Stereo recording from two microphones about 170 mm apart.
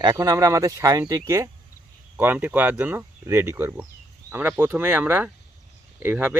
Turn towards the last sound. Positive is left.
turn(degrees=-10)  # may be behind; listen again after turning